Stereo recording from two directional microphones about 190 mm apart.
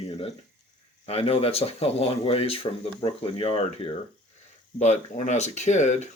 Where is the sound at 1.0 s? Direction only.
30° left (ahead or behind).